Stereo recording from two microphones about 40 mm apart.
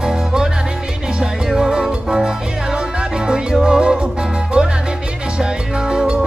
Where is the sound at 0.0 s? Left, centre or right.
Centre.